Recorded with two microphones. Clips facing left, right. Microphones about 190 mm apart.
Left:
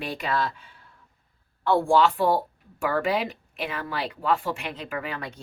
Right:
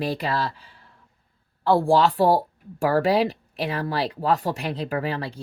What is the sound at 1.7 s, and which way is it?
Speech, 35° right (ahead or behind).